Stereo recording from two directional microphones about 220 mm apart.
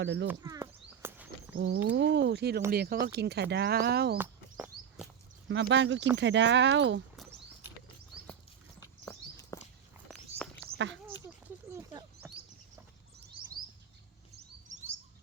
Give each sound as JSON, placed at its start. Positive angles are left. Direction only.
{"t": 0.0, "sound": "speech", "side_deg": -50}
{"t": 0.3, "sound": "a sound", "side_deg": -15}
{"t": 1.5, "sound": "speech", "side_deg": -50}
{"t": 4.2, "sound": "a sound", "side_deg": -5}
{"t": 5.5, "sound": "speech", "side_deg": -55}
{"t": 9.5, "sound": "walk", "side_deg": 15}
{"t": 10.1, "sound": "walk", "side_deg": 5}
{"t": 11.3, "sound": "a sound", "side_deg": -10}
{"t": 14.7, "sound": "bird", "side_deg": -35}